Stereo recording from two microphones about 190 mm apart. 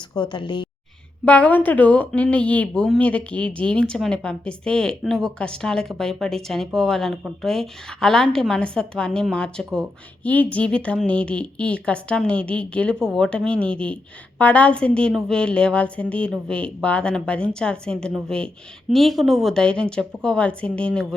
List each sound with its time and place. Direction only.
0.1 s a woman's voice: 25° left (ahead or behind)
1.2 s a woman's voice: 10° left (ahead or behind)